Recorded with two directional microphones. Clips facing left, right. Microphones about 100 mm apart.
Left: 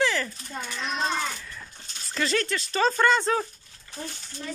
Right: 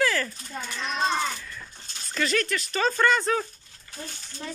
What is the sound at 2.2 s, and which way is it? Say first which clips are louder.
Speech: even; 30° left (ahead or behind).